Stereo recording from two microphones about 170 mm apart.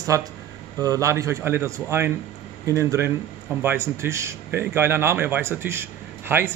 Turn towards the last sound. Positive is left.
turn(degrees=-10)  # may be behind; listen again after turning